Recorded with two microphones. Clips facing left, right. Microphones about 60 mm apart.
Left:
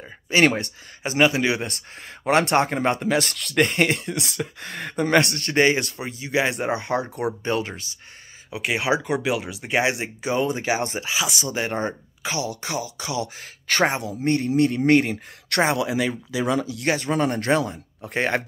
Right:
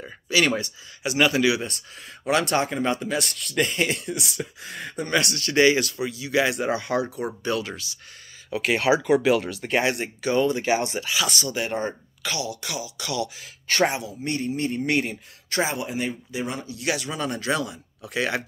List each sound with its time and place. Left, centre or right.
0.3 s speech: left
1.6 s speech: left
3.1 s speech: left
5.2 s speech: left
8.5 s speech: centre
10.6 s speech: left
13.4 s speech: left
14.0 s speech: left
14.6 s speech: left
14.9 s speech: left
15.5 s speech: left
16.8 s speech: left